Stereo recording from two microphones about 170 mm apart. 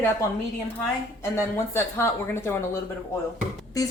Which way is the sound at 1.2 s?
15° left (ahead or behind).